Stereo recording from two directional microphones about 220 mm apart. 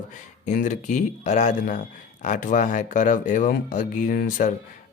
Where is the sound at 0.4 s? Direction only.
35° left (ahead or behind).